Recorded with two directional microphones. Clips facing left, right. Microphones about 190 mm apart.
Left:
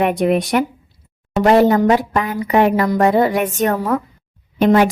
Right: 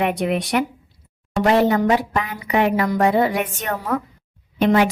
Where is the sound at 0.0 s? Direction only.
45° left (ahead or behind).